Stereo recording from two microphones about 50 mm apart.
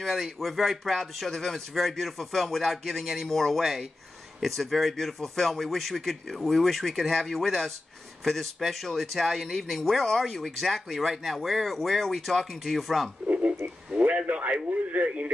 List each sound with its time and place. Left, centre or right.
0.0 s speech: centre
13.3 s a sound: right
13.9 s radio: right